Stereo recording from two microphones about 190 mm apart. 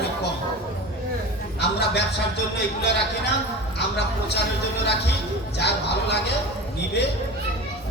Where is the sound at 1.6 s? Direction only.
60° left (ahead or behind).